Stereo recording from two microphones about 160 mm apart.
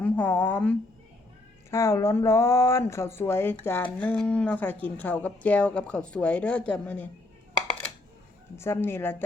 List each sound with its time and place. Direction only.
0.0 s speech: 10° left (ahead or behind)
8.5 s speech: 15° left (ahead or behind)